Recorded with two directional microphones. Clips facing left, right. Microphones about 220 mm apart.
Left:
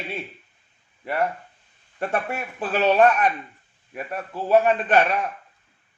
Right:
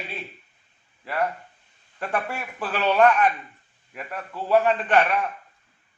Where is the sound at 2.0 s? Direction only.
25° left (ahead or behind).